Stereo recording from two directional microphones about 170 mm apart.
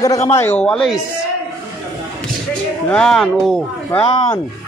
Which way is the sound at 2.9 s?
5° left (ahead or behind).